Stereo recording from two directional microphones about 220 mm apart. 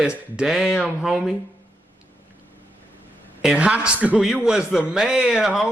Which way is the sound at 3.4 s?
5° right (ahead or behind).